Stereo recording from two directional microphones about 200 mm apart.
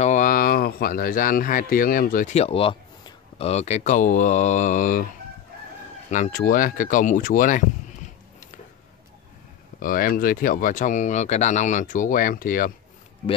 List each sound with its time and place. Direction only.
0.0 s speech: 40° left (ahead or behind)
6.0 s speech: 35° left (ahead or behind)
9.8 s speech: 45° left (ahead or behind)